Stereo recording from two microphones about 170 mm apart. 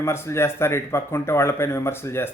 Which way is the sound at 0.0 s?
15° left (ahead or behind).